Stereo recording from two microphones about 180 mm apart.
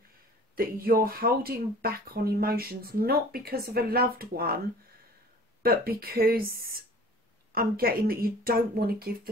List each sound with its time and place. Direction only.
0.6 s speech: 55° right (ahead or behind)
5.6 s speech: 55° right (ahead or behind)